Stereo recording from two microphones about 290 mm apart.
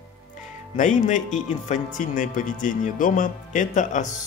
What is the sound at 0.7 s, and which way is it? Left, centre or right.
Speech, left.